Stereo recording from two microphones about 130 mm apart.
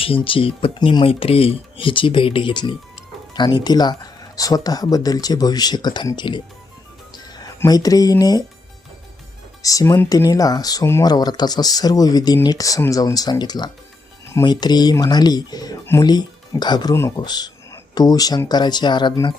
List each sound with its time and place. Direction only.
0.0 s speech: 45° left (ahead or behind)
7.7 s speech: 30° left (ahead or behind)
9.6 s speech: 25° left (ahead or behind)